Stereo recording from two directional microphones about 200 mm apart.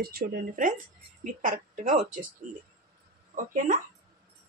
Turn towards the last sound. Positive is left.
turn(degrees=-40)  # may be behind; listen again after turning